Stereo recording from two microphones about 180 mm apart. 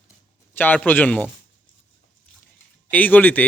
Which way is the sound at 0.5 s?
10° left (ahead or behind).